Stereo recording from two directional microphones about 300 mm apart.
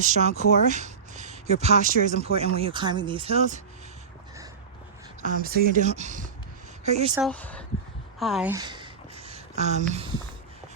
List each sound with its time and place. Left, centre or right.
0.0 s speech: right
5.2 s speech: right
7.2 s speech: centre
8.2 s a sound: centre